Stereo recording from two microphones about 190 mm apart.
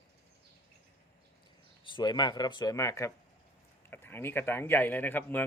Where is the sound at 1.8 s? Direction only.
25° left (ahead or behind).